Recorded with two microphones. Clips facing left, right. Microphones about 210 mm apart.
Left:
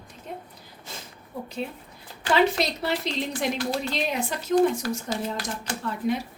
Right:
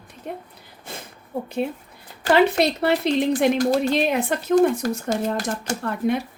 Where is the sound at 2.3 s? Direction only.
60° right (ahead or behind).